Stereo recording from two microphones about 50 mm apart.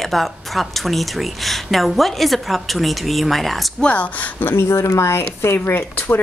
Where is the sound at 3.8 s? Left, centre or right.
Left.